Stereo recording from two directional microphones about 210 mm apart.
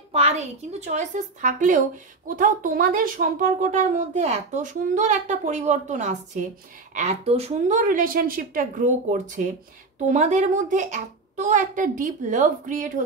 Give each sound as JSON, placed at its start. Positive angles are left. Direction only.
{"t": 0.1, "sound": "a woman's voice", "side_deg": -30}